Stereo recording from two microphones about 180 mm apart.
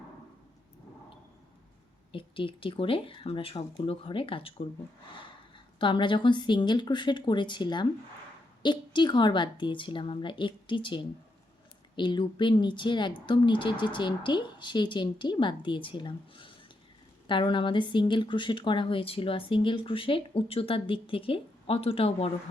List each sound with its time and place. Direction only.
2.1 s speech: 30° left (ahead or behind)
5.8 s speech: 25° left (ahead or behind)